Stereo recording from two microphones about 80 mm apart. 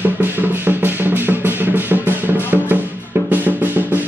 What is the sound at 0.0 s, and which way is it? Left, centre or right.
Music, right.